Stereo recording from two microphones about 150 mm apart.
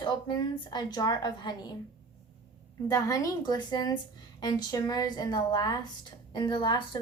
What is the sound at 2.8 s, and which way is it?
A woman's voice, 20° left (ahead or behind).